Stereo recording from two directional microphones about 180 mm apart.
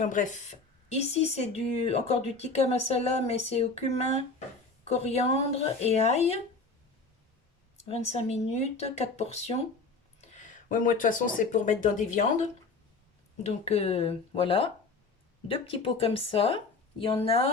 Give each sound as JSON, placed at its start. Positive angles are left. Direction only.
{"t": 0.0, "sound": "speech", "side_deg": 45}
{"t": 7.8, "sound": "speech", "side_deg": 35}